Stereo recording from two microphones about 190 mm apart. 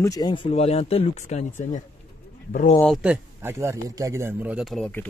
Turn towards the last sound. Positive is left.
turn(degrees=5)  # may be behind; listen again after turning